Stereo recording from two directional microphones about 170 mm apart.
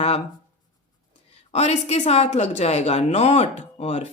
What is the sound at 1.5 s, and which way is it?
Speech, 40° left (ahead or behind).